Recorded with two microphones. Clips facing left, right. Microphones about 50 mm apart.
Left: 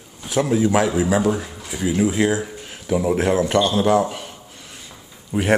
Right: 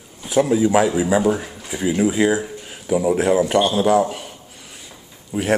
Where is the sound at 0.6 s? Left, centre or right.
Centre.